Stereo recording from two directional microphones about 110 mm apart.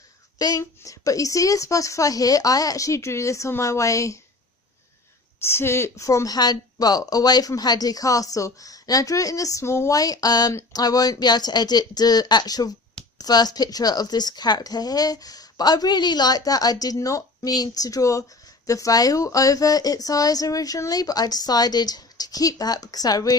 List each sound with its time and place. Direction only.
0.3 s speech: 35° left (ahead or behind)
5.4 s speech: 20° left (ahead or behind)